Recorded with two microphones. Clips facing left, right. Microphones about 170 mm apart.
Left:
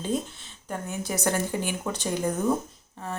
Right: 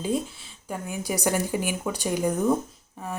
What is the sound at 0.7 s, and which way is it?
Speech, 10° right (ahead or behind).